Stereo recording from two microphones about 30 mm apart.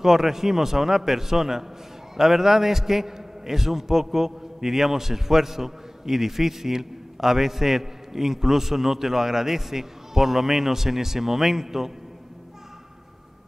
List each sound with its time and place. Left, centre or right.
0.0 s a man's voice: centre